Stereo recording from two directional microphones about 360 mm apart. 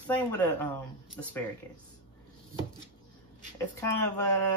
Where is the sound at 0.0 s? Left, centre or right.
Centre.